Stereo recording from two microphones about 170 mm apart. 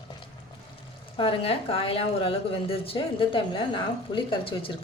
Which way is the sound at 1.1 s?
30° left (ahead or behind).